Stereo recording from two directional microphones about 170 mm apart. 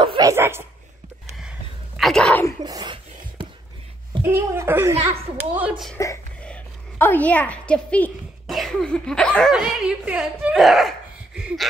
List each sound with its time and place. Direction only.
0.0 s dog: 30° right (ahead or behind)
0.3 s dog: 15° right (ahead or behind)
2.0 s a sound: 5° left (ahead or behind)
2.6 s dog: 25° right (ahead or behind)
4.2 s a sound: 15° right (ahead or behind)
5.1 s speech: 35° right (ahead or behind)
5.6 s a woman's voice: centre (ahead or behind)